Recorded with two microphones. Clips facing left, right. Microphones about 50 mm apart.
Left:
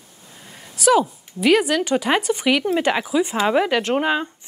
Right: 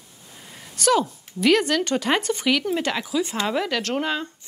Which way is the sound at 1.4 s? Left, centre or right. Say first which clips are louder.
Left 2 dB; centre.